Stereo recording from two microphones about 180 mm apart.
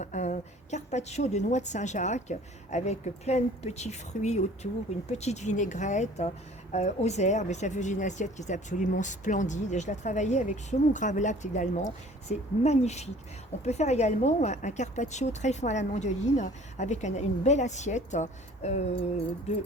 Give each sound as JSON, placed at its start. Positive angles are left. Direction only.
{"t": 0.0, "sound": "a woman's voice", "side_deg": 40}